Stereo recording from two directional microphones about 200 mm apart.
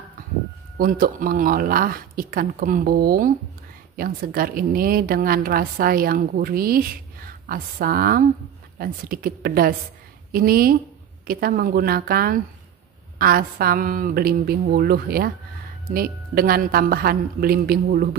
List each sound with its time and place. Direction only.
0.7 s a woman's voice: 45° right (ahead or behind)